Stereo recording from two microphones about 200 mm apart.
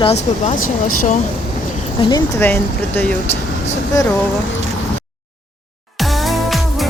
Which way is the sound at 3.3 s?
35° left (ahead or behind).